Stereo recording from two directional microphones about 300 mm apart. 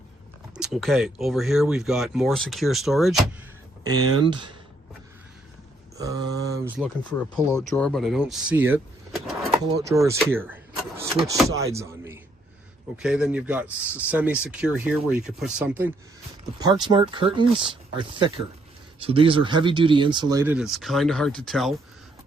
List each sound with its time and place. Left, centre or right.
0.5 s speech: centre
3.8 s speech: centre
6.0 s speech: centre
7.3 s speech: centre